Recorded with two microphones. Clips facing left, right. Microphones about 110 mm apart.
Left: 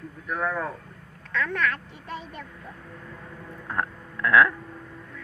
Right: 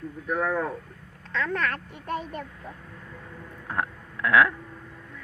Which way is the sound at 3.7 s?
10° right (ahead or behind).